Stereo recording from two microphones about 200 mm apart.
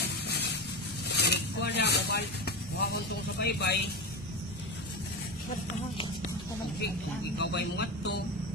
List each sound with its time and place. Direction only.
0.0 s vehicle: 55° left (ahead or behind)
1.1 s a sound: 55° left (ahead or behind)
7.3 s a man's voice: 55° left (ahead or behind)